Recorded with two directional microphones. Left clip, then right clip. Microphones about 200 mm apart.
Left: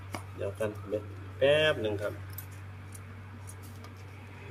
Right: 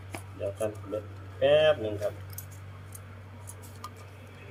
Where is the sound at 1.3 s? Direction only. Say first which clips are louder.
Right 3 dB; 60° left (ahead or behind).